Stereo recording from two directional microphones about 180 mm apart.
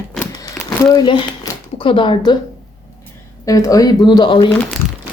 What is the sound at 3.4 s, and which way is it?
Speech, 20° left (ahead or behind).